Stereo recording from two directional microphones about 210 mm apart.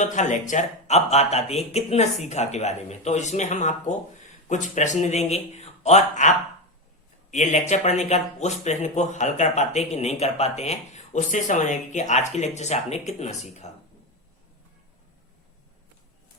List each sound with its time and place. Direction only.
0.0 s speech: 35° left (ahead or behind)